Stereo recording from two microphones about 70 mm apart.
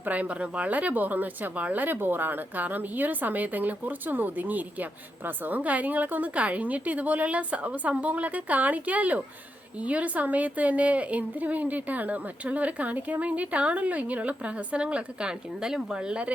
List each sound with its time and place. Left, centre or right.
0.0 s speech: right